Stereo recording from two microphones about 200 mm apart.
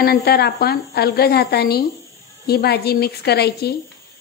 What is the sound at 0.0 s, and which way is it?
A woman's voice, 50° left (ahead or behind).